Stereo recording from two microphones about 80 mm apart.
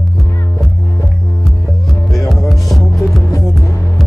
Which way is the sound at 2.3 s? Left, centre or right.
Centre.